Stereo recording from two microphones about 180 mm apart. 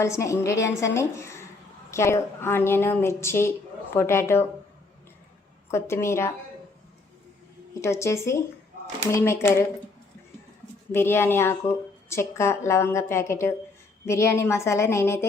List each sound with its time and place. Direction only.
0.0 s a woman's voice: 15° left (ahead or behind)
5.7 s a woman's voice: 15° left (ahead or behind)
7.8 s a woman's voice: 15° left (ahead or behind)
10.9 s a woman's voice: 15° left (ahead or behind)